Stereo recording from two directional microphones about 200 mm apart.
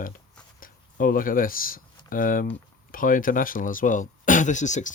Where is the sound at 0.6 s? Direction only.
45° left (ahead or behind).